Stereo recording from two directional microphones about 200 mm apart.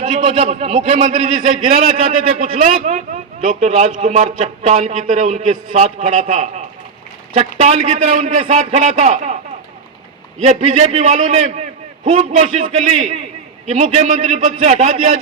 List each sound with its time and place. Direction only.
0.0 s a man's voice: 35° right (ahead or behind)
10.4 s a man's voice: 30° right (ahead or behind)